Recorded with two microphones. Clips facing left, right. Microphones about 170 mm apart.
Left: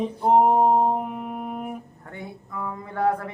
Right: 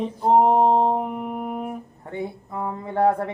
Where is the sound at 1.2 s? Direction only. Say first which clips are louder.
Right 3 dB; centre (ahead or behind).